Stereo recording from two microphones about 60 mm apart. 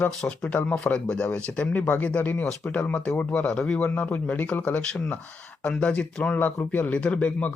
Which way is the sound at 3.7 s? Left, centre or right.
Left.